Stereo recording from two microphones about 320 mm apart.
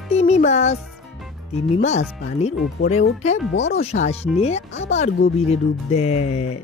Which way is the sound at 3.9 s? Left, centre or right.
Left.